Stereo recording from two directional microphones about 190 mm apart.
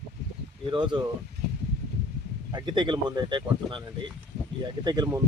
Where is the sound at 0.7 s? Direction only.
25° right (ahead or behind).